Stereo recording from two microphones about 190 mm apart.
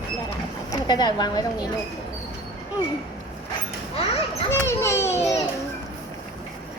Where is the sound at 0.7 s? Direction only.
20° left (ahead or behind).